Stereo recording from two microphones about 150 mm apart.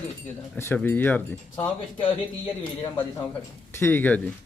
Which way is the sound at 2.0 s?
35° left (ahead or behind).